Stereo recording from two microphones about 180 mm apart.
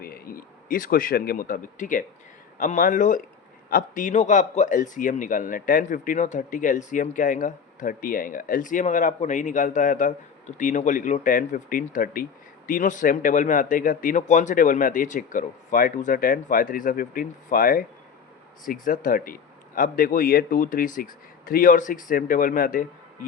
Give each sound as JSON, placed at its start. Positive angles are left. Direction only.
{"t": 0.0, "sound": "speech", "side_deg": 55}